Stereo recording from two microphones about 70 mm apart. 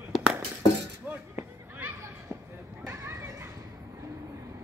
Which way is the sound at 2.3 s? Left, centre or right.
Right.